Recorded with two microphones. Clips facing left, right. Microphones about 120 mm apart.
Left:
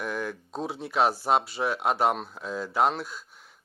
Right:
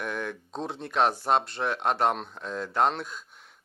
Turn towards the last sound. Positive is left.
turn(degrees=0)  # may be behind; listen again after turning